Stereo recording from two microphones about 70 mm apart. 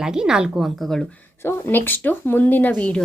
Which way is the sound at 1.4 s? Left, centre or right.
Left.